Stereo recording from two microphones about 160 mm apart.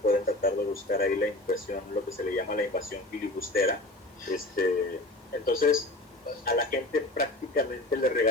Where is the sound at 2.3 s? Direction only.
60° left (ahead or behind).